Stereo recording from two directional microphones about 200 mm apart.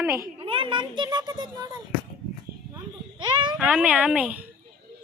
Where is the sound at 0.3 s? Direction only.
25° right (ahead or behind).